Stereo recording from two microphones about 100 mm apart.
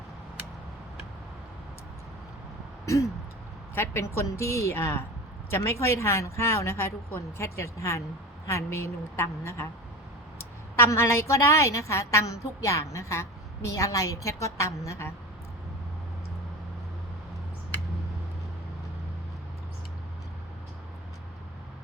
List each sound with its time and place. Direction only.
2.8 s a sound: 30° left (ahead or behind)
3.8 s a woman's voice: 25° left (ahead or behind)
10.8 s a woman's voice: 25° left (ahead or behind)